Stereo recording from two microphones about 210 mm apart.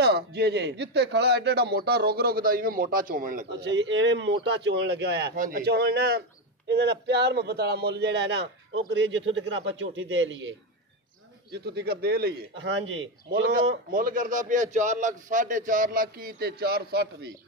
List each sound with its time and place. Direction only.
0.0 s a man's voice: 50° right (ahead or behind)
3.4 s a man's voice: 55° right (ahead or behind)
11.5 s a man's voice: 50° right (ahead or behind)
13.3 s a man's voice: 45° right (ahead or behind)